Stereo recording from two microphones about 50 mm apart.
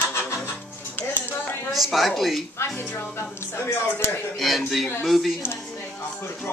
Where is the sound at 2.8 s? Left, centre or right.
Left.